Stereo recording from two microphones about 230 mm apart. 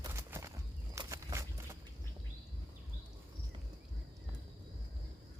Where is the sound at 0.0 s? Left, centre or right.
Centre.